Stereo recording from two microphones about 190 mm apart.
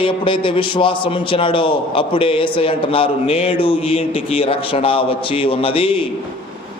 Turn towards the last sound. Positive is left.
turn(degrees=30)  # may be behind; listen again after turning